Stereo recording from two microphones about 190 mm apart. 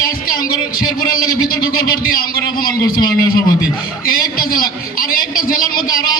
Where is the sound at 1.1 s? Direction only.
50° left (ahead or behind).